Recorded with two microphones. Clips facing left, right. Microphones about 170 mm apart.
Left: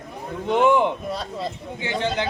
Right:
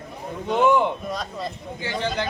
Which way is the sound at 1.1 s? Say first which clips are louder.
Left 1 dB; 30° left (ahead or behind).